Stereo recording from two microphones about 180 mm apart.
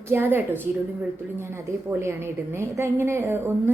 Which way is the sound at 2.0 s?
15° right (ahead or behind).